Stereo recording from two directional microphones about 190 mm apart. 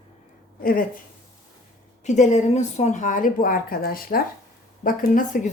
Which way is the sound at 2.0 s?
40° left (ahead or behind).